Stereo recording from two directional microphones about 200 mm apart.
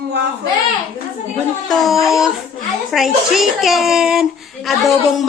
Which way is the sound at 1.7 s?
Centre (ahead or behind).